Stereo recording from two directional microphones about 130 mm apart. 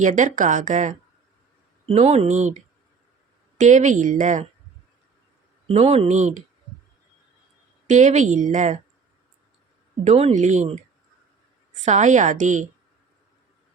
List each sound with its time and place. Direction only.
0.0 s a woman's voice: 70° right (ahead or behind)
1.9 s a woman's voice: 55° right (ahead or behind); by 4.4 s 80° right
5.6 s speech: 50° right (ahead or behind)
7.9 s a woman's voice: 70° right (ahead or behind)
10.0 s speech: 55° right (ahead or behind)
11.9 s a woman's voice: 70° right (ahead or behind)